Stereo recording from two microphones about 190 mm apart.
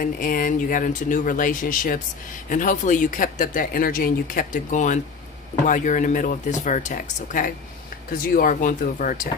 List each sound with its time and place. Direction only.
0.0 s speech: 45° left (ahead or behind)